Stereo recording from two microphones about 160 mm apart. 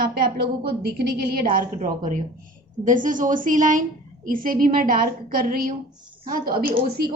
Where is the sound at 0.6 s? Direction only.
85° right.